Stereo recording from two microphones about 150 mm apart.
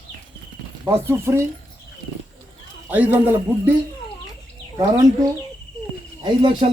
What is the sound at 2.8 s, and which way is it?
Speech, 10° right (ahead or behind).